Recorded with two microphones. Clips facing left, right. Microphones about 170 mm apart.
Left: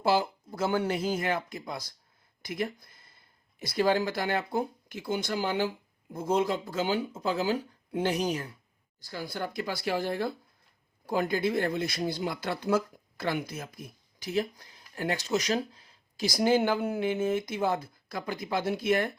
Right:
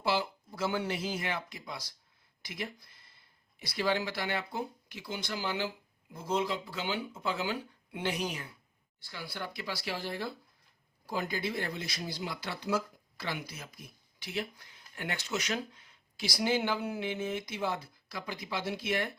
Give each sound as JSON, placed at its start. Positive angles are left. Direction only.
{"t": 0.0, "sound": "speech", "side_deg": 45}